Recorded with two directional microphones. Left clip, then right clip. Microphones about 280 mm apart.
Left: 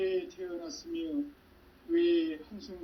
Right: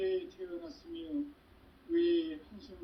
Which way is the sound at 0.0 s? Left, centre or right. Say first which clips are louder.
Left 3 dB; left.